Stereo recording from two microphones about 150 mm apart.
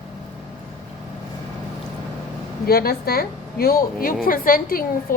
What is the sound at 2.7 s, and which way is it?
A woman's voice, 90° left.